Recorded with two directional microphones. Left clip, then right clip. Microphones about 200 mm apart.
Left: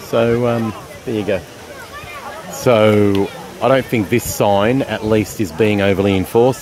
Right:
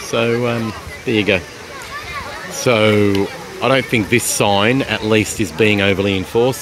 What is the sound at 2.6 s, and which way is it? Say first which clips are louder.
Speech: left 2 dB; centre (ahead or behind).